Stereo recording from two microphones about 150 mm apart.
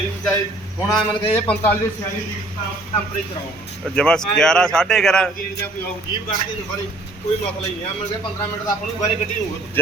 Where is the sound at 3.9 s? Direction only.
5° left (ahead or behind).